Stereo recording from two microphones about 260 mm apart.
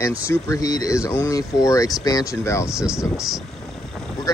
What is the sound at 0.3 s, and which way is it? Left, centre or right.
Speech, centre.